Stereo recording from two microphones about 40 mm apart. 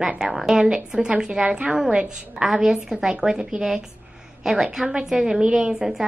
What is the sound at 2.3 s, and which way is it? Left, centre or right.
A woman's voice, centre.